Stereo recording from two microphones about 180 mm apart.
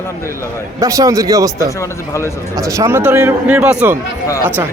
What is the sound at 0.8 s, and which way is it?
Speech, 20° right (ahead or behind).